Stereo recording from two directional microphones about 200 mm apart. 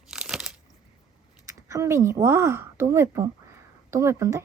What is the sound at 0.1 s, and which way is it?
Crunch, 5° right (ahead or behind).